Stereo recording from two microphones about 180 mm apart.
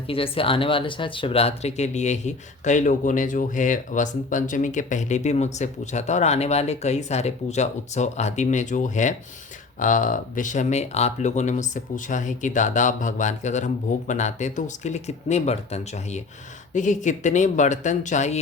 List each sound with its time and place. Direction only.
0.1 s speech: 30° left (ahead or behind)